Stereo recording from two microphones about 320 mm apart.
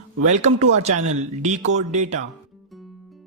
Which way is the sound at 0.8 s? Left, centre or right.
Right.